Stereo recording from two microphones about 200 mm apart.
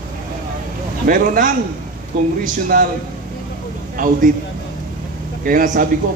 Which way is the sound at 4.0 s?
40° right (ahead or behind).